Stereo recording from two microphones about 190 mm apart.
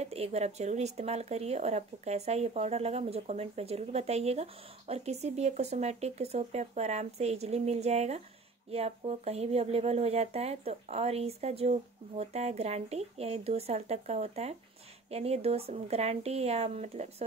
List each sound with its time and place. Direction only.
0.0 s speech: 35° right (ahead or behind)